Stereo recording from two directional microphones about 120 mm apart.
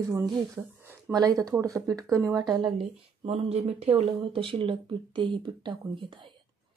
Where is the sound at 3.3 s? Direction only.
55° right (ahead or behind).